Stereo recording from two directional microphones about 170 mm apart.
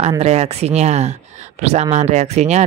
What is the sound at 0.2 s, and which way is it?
A woman's voice, 40° right (ahead or behind).